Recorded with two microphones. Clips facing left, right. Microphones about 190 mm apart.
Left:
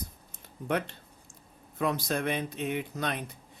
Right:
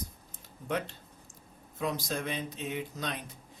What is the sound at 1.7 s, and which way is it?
Speech, 60° left (ahead or behind).